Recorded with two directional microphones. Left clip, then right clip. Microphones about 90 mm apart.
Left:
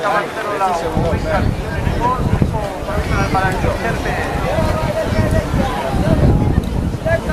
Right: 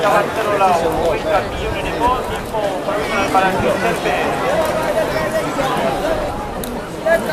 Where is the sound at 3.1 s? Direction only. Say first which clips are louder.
Right 2 dB; 35° right (ahead or behind).